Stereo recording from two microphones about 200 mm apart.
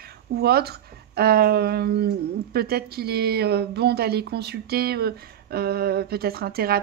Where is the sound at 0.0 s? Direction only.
50° right (ahead or behind).